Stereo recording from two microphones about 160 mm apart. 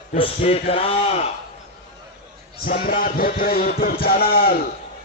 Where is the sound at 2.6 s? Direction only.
60° left (ahead or behind).